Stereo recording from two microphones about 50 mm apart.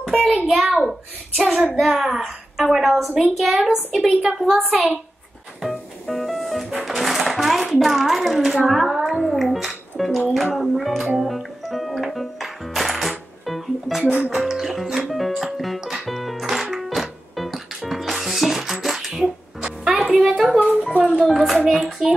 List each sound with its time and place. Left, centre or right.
0.0 s a sound: centre
0.5 s a child's voice: centre
1.8 s a child's voice: centre
4.1 s a child's voice: centre
4.4 s a child's voice: centre
5.6 s music: centre
7.8 s a child's voice: centre
8.6 s music: centre
10.3 s a child's voice: centre
11.1 s music: centre
20.4 s hands: centre
20.9 s speech: right
21.2 s a child's voice: centre
21.6 s hands: centre